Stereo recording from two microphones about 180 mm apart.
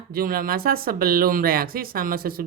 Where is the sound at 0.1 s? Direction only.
55° right (ahead or behind).